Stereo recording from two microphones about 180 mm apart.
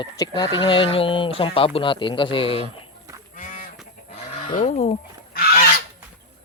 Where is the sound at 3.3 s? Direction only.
45° left (ahead or behind).